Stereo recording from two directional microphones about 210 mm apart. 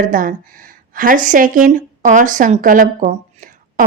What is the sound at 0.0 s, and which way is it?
A woman's voice, 40° right (ahead or behind).